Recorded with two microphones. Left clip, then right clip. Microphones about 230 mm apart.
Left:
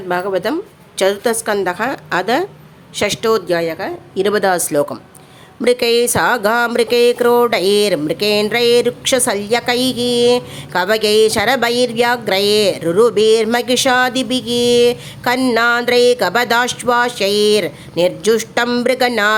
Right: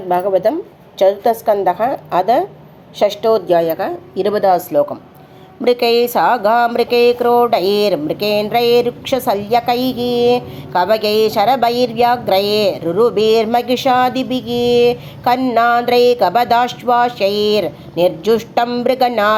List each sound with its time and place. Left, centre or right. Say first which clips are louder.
0.3 s a woman's voice: right 4 dB; left